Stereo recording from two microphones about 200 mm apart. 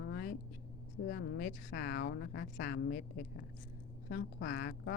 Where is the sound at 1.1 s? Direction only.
50° left (ahead or behind).